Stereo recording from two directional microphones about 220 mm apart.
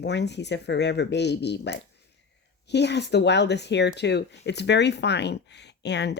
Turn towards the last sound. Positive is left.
turn(degrees=50)  # may be behind; listen again after turning